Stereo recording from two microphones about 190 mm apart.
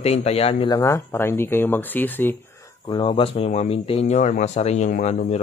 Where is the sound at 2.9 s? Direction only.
25° left (ahead or behind).